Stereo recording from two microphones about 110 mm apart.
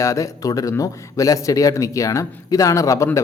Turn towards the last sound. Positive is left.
turn(degrees=25)  # may be behind; listen again after turning